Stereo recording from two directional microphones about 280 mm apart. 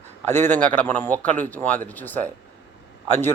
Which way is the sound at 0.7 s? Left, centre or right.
Centre.